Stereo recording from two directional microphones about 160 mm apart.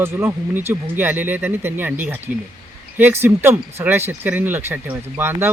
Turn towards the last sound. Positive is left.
turn(degrees=-15)  # may be behind; listen again after turning